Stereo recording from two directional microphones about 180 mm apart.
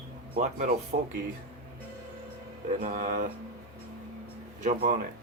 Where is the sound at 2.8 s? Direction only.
50° right (ahead or behind).